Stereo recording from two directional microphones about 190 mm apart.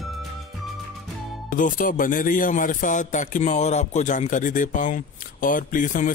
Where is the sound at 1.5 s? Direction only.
45° left (ahead or behind).